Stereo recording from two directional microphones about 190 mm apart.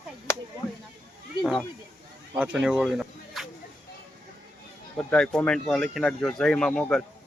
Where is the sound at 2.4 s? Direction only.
5° right (ahead or behind).